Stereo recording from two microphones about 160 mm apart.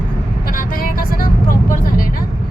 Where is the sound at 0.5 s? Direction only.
65° left (ahead or behind).